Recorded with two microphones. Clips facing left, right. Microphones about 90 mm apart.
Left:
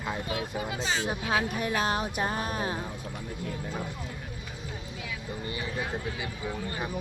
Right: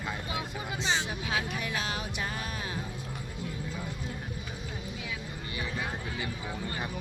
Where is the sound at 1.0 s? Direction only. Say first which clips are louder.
Left 5 dB; 40° left (ahead or behind).